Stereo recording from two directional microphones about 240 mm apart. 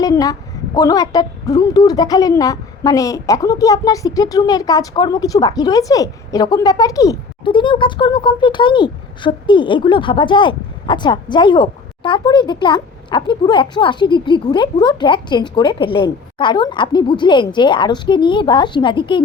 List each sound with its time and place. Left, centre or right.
0.0 s a woman's voice: centre